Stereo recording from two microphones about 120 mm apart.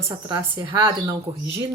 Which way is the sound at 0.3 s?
35° right (ahead or behind).